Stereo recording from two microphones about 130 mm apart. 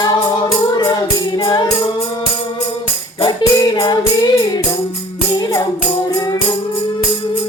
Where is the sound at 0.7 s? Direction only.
30° left (ahead or behind).